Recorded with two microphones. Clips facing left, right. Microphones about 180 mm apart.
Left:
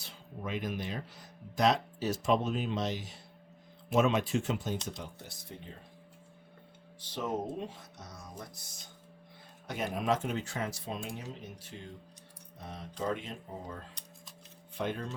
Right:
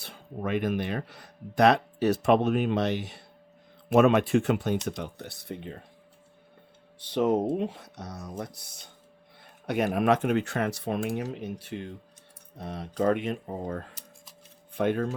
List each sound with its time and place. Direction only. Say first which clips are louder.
0.0 s speech: right 8 dB; 60° right (ahead or behind)
7.0 s speech: right 11 dB; 65° right (ahead or behind)